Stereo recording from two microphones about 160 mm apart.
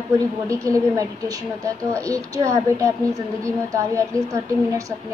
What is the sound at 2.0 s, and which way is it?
A woman's voice, 20° right (ahead or behind).